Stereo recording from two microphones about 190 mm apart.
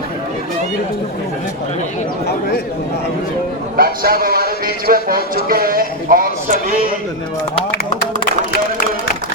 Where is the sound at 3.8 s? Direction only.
50° right (ahead or behind).